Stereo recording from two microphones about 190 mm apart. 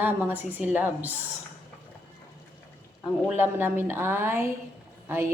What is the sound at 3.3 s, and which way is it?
A woman's voice, 10° right (ahead or behind).